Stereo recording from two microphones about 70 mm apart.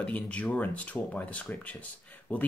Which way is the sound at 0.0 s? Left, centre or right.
Centre.